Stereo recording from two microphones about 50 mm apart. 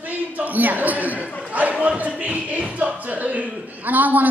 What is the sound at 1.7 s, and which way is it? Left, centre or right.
Speech, centre.